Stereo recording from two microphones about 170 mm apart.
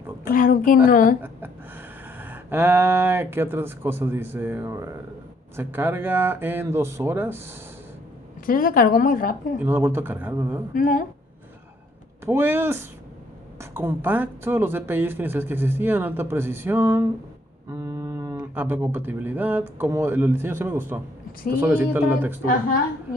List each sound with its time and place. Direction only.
0.2 s a woman's voice: 55° left (ahead or behind)
2.1 s speech: 10° right (ahead or behind)
8.5 s a woman's voice: 55° left (ahead or behind)
9.7 s speech: 15° right (ahead or behind)
10.7 s a woman's voice: 50° left (ahead or behind)
12.3 s speech: 15° right (ahead or behind)